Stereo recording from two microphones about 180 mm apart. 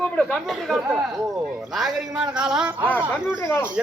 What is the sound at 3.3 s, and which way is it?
Speech, 15° left (ahead or behind).